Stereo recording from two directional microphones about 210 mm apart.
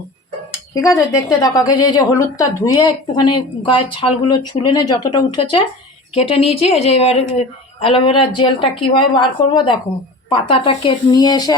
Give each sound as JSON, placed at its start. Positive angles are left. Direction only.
{"t": 0.7, "sound": "a woman's voice", "side_deg": 15}